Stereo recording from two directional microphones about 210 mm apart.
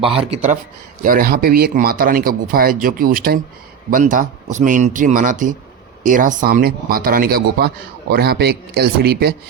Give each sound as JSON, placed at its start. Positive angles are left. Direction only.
{"t": 1.0, "sound": "speech", "side_deg": -45}